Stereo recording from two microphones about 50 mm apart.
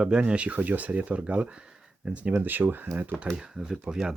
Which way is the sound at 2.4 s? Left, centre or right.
Right.